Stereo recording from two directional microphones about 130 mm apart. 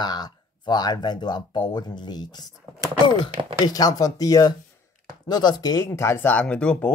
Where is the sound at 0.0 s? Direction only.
35° left (ahead or behind).